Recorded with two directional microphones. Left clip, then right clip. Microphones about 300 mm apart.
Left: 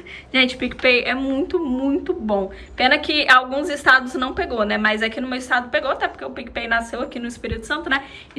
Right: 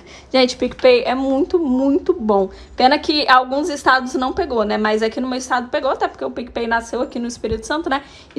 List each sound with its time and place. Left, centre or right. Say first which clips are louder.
0.3 s a woman's voice: right 3 dB; centre